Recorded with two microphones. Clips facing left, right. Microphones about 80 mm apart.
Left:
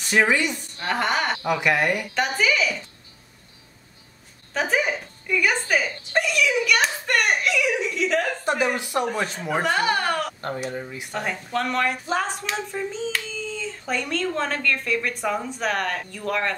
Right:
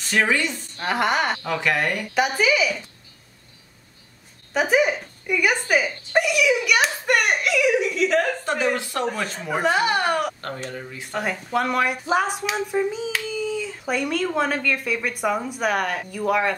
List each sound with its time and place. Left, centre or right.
0.0 s a woman's voice: centre
0.7 s speech: centre
1.4 s speech: centre
2.1 s speech: centre
4.6 s speech: centre
8.5 s speech: centre
9.5 s speech: centre
10.4 s speech: centre
11.1 s speech: centre